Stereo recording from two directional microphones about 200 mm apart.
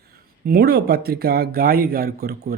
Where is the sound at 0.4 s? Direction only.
50° right (ahead or behind).